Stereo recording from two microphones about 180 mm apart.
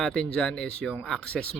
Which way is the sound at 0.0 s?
5° left (ahead or behind).